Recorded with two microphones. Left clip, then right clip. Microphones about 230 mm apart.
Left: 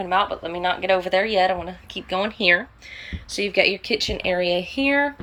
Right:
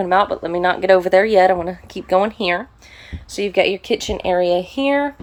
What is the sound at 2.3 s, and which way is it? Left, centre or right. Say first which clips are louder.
Speech: left 1 dB; centre.